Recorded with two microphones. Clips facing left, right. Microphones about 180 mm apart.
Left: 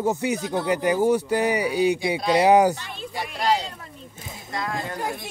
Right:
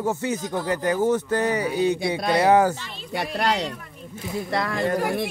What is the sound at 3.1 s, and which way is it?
Speech, 65° right (ahead or behind).